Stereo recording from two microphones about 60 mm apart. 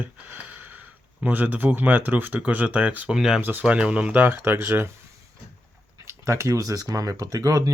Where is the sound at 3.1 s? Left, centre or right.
Centre.